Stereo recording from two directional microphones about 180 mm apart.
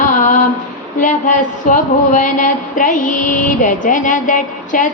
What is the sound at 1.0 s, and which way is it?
Speech, 45° left (ahead or behind).